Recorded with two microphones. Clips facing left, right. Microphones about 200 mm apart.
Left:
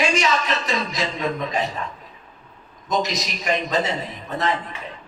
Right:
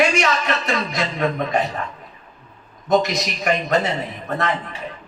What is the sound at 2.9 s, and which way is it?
A man's voice, 60° right (ahead or behind).